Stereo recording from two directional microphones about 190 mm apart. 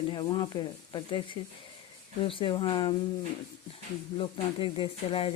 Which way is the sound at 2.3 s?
25° left (ahead or behind).